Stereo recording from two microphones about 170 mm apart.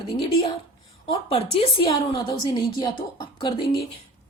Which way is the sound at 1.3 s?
35° left (ahead or behind).